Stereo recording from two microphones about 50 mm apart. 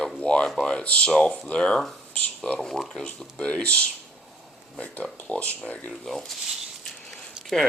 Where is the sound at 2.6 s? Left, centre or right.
Centre.